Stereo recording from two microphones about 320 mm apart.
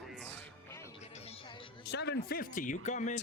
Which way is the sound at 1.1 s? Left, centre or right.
Centre.